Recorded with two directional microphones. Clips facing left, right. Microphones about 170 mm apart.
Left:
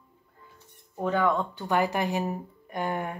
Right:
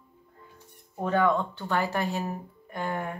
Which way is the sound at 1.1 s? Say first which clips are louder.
Right 1 dB; 10° left (ahead or behind).